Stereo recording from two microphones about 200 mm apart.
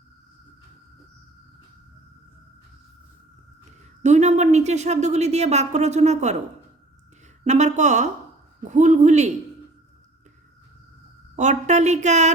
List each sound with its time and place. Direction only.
4.0 s speech: 35° right (ahead or behind)
7.4 s speech: 35° right (ahead or behind)
11.3 s speech: 35° right (ahead or behind)